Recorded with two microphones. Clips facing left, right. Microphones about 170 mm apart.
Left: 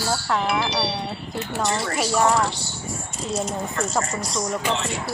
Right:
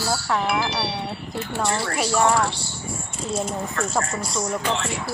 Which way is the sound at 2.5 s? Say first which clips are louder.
Even; 30° right (ahead or behind).